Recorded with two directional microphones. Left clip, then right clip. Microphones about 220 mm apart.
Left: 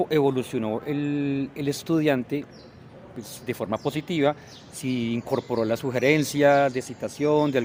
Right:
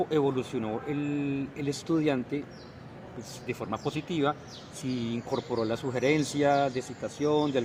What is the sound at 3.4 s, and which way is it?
Speech, 50° left (ahead or behind).